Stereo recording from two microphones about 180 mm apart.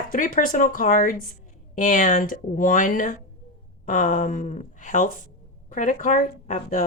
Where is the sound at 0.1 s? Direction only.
50° left (ahead or behind).